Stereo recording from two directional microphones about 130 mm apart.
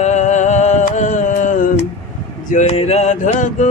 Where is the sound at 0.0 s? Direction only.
65° left (ahead or behind).